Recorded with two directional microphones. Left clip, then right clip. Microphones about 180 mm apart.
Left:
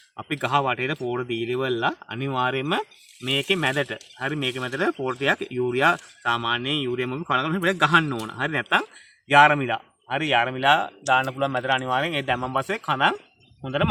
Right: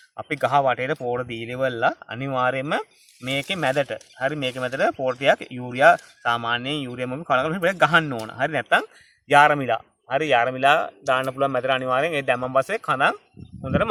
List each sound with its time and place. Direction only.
0.2 s speech: 55° right (ahead or behind)